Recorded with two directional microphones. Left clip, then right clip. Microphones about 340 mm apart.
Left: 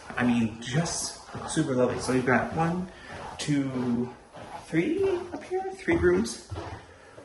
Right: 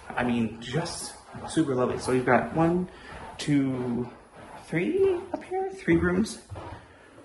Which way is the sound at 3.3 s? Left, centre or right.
Centre.